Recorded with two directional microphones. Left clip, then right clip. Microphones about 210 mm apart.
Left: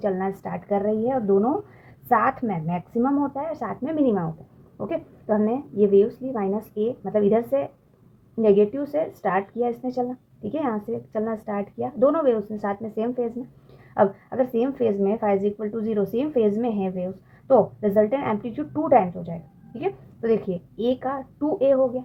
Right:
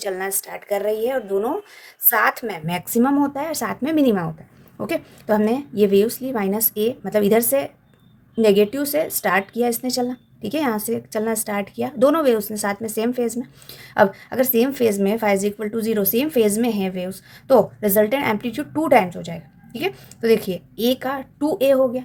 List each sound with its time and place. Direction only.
0.0 s a woman's voice: 40° right (ahead or behind)